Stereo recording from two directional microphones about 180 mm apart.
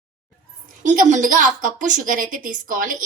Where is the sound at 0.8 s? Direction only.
45° right (ahead or behind).